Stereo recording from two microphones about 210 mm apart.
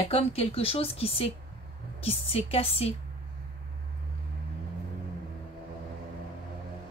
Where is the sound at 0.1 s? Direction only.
30° left (ahead or behind).